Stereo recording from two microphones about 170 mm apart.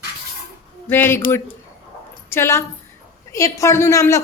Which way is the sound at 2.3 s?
15° left (ahead or behind).